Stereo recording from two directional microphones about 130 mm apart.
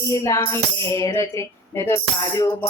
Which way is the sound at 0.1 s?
25° left (ahead or behind).